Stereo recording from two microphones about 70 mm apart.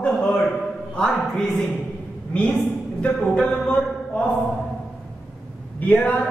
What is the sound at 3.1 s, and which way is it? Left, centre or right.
Speech, centre.